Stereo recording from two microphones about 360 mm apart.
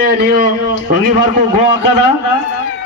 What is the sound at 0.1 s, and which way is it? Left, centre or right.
Speech, right.